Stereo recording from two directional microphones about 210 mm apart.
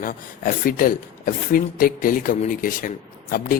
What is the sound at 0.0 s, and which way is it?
Speech, 40° left (ahead or behind).